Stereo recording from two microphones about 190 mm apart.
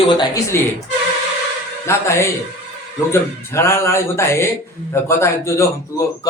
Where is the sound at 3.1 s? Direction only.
15° left (ahead or behind).